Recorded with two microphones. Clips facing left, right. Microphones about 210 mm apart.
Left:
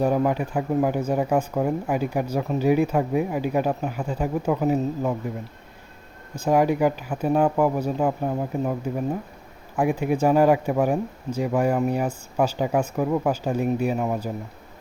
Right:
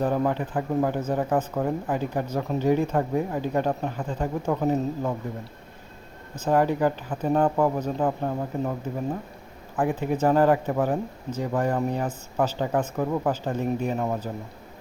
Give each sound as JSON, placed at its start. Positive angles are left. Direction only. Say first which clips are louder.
{"t": 0.0, "sound": "speech", "louder": "left 3 dB", "side_deg": 10}
{"t": 6.3, "sound": "speech", "louder": "left 2 dB", "side_deg": 10}
{"t": 9.7, "sound": "speech", "louder": "left 3 dB", "side_deg": 10}